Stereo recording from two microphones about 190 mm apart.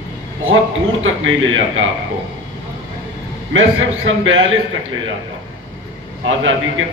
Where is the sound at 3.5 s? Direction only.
90° right.